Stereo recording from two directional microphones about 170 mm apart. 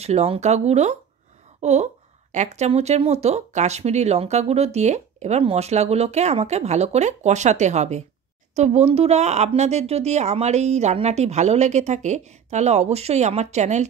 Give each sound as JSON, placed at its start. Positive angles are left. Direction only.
{"t": 0.0, "sound": "speech", "side_deg": -40}